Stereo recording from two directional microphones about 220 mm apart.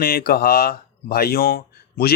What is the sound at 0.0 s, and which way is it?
Speech, 45° left (ahead or behind).